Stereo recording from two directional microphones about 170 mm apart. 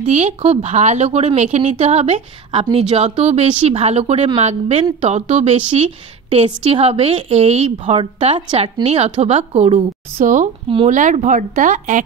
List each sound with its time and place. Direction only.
0.0 s a woman's voice: 40° right (ahead or behind)
8.5 s speech: 25° right (ahead or behind)
8.8 s a woman's voice: 40° right (ahead or behind)